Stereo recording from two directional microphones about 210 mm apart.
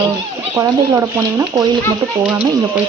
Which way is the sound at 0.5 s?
10° right (ahead or behind).